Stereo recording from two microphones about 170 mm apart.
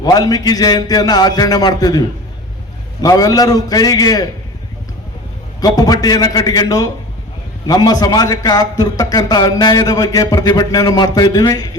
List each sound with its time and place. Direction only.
0.0 s a man's voice: 20° left (ahead or behind)
5.5 s a man's voice: 20° left (ahead or behind)